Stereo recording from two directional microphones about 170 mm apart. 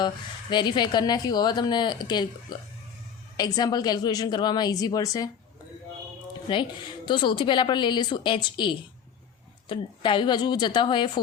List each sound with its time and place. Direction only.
0.5 s a woman's voice: 25° left (ahead or behind)
6.5 s a woman's voice: 25° left (ahead or behind)